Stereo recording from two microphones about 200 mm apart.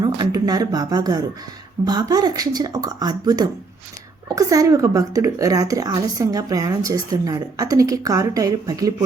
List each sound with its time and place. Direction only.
0.0 s a woman's voice: 20° right (ahead or behind)